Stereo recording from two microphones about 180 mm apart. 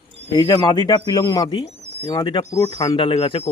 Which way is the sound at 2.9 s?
30° left (ahead or behind).